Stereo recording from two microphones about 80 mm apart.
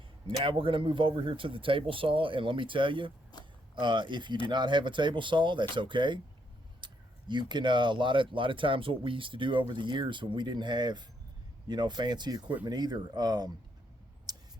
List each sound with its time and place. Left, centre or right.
0.3 s speech: right
3.8 s speech: right
6.8 s speech: right
14.3 s a sound: right